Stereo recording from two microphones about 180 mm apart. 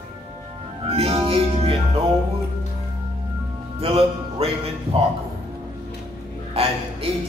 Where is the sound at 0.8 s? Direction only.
35° right (ahead or behind).